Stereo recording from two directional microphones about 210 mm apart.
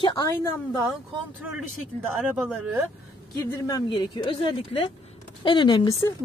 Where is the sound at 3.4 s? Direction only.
15° left (ahead or behind).